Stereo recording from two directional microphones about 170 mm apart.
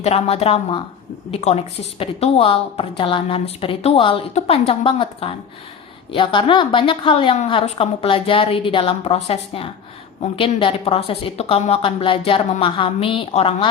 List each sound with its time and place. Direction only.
0.0 s a woman's voice: 40° left (ahead or behind)